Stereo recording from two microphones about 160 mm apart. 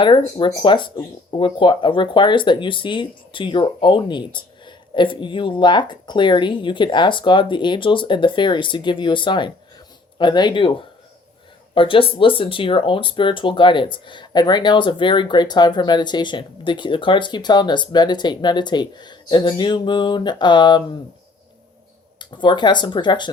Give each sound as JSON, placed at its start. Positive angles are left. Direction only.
{"t": 0.0, "sound": "speech", "side_deg": 30}
{"t": 11.7, "sound": "speech", "side_deg": 35}
{"t": 22.2, "sound": "speech", "side_deg": 30}